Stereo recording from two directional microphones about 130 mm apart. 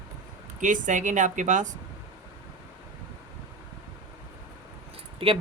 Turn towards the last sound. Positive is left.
turn(degrees=-45)  # may be behind; listen again after turning